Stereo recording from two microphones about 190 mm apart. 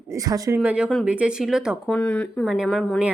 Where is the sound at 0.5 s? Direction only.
5° right (ahead or behind).